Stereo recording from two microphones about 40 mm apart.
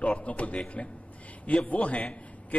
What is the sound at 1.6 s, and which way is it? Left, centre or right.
Speech, left.